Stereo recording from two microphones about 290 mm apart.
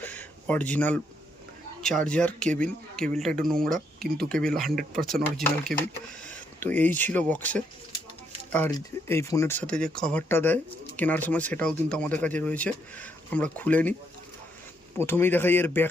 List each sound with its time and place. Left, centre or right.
0.0 s a sound: centre
1.8 s speech: centre
4.8 s speech: right
5.1 s speech: centre
14.9 s speech: centre